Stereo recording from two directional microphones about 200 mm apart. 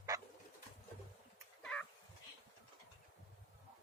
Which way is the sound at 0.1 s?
20° right (ahead or behind).